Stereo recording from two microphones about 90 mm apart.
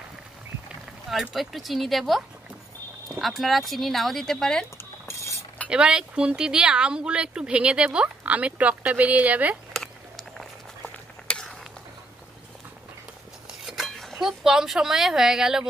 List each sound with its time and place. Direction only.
1.3 s speech: centre (ahead or behind)
5.7 s speech: 10° right (ahead or behind)
9.8 s a sound: centre (ahead or behind)
13.6 s speech: centre (ahead or behind)